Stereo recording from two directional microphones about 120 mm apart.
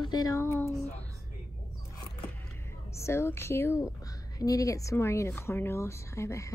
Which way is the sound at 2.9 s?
25° left (ahead or behind).